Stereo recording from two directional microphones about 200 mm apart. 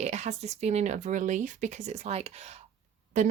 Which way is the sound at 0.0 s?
35° right (ahead or behind).